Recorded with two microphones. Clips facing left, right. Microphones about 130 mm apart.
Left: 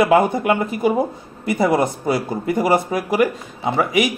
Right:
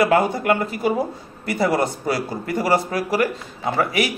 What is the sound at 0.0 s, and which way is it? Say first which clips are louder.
A man's voice: left 3 dB; 20° left (ahead or behind).